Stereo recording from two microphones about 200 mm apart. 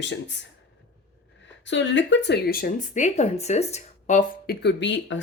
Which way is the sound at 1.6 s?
65° left (ahead or behind).